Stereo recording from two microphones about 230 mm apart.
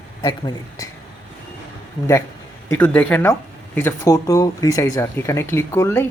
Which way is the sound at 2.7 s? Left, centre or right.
Centre.